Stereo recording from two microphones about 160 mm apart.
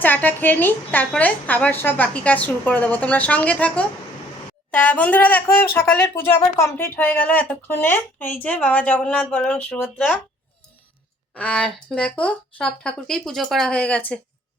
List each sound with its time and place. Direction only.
0.0 s a woman's voice: 10° left (ahead or behind)
11.3 s speech: 5° left (ahead or behind)